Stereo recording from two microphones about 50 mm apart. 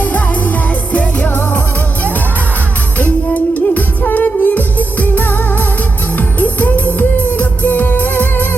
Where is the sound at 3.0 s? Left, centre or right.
Left.